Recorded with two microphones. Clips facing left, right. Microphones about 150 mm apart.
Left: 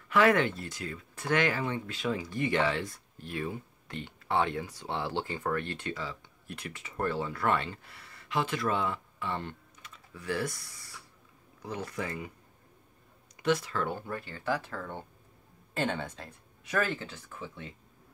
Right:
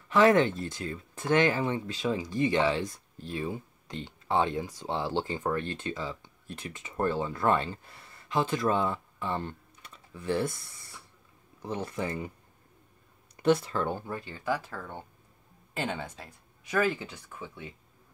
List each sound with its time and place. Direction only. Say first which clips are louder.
0.1 s speech: right 3 dB; 25° right (ahead or behind)
13.4 s speech: right 4 dB; 30° right (ahead or behind); by 17.7 s 10° right (ahead or behind)